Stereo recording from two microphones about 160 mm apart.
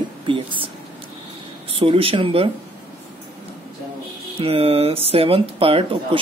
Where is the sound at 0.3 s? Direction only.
30° right (ahead or behind).